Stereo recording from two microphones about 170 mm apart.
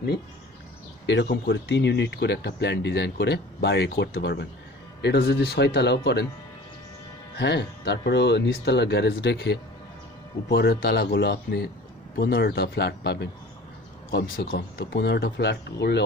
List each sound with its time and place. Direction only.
1.0 s speech: 90° left
7.3 s speech: 90° left
10.5 s speech: 70° left (ahead or behind); by 13.3 s 85° left
14.1 s speech: 65° left (ahead or behind)
14.5 s speech: 80° left